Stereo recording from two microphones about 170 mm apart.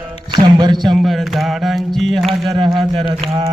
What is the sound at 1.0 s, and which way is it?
Mantra, centre (ahead or behind).